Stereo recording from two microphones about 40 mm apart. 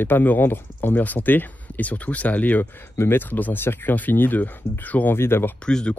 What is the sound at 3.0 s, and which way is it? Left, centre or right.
Speech, left.